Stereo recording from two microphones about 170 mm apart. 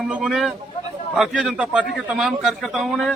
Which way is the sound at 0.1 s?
Centre (ahead or behind).